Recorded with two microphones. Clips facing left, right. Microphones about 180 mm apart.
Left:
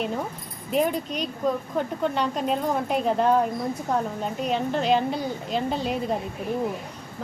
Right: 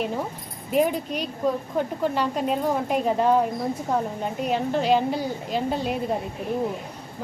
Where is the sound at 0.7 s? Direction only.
5° right (ahead or behind).